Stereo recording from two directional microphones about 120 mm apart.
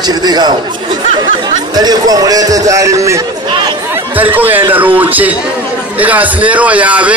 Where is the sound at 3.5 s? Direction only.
40° right (ahead or behind).